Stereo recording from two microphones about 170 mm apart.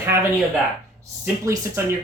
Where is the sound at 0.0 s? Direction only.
15° right (ahead or behind).